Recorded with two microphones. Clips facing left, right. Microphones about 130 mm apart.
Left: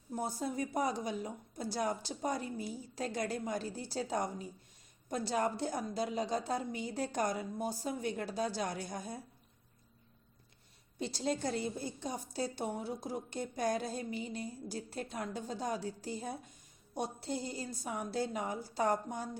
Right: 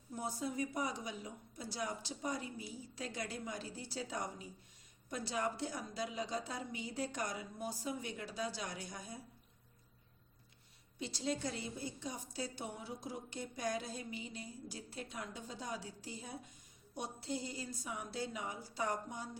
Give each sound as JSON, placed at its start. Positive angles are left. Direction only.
{"t": 0.2, "sound": "a woman's voice", "side_deg": 40}
{"t": 11.0, "sound": "a woman's voice", "side_deg": 40}